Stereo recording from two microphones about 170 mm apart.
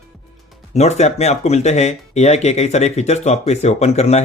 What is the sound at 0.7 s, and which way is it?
Speech, 40° left (ahead or behind).